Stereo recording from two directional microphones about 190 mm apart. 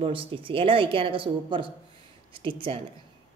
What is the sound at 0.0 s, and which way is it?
Speech, 30° right (ahead or behind).